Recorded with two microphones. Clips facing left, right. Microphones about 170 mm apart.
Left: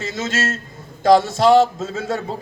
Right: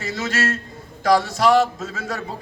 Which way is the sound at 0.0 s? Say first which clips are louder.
Left 1 dB; 25° left (ahead or behind).